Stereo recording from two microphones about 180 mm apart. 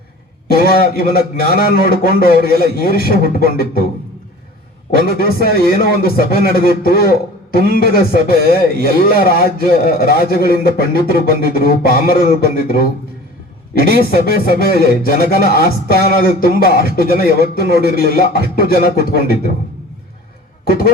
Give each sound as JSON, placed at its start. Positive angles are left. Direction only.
{"t": 0.4, "sound": "a man's voice", "side_deg": 55}
{"t": 4.9, "sound": "a man's voice", "side_deg": 55}